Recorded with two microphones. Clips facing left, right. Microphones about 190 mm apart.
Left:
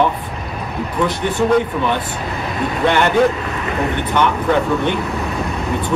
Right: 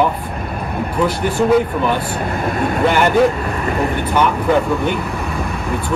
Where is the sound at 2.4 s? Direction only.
50° right (ahead or behind).